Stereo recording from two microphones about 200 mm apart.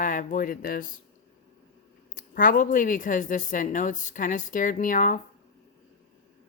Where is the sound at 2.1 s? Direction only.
45° left (ahead or behind).